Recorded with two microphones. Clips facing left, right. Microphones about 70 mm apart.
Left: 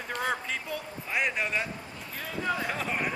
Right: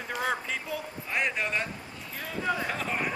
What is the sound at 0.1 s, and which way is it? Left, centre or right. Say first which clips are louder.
A man's voice: even; centre.